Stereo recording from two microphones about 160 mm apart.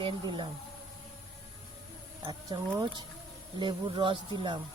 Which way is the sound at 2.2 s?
25° right (ahead or behind).